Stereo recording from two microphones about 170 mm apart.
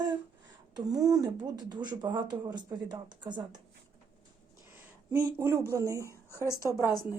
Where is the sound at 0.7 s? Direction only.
20° right (ahead or behind).